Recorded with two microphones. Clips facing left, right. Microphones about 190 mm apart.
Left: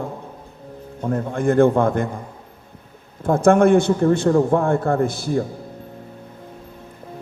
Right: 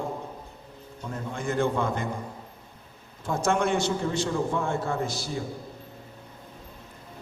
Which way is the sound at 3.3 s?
55° left (ahead or behind).